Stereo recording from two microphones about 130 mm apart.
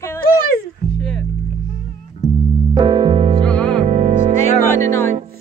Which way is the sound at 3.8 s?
60° right (ahead or behind).